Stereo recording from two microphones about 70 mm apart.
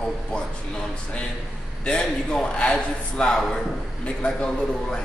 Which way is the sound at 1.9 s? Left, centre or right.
Centre.